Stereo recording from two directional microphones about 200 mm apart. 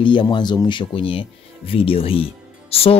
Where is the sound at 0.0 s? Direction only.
25° left (ahead or behind).